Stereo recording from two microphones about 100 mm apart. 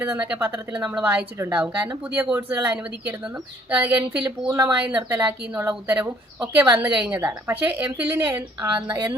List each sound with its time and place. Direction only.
0.0 s speech: 10° right (ahead or behind)
5.1 s a woman's voice: 25° right (ahead or behind)